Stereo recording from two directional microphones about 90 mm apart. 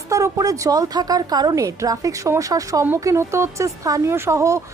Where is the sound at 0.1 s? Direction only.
40° right (ahead or behind).